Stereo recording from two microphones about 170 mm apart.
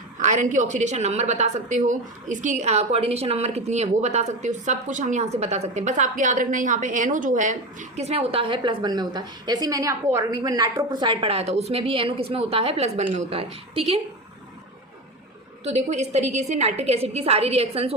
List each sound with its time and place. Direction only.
0.2 s a woman's voice: 45° right (ahead or behind)
15.6 s a woman's voice: 40° right (ahead or behind)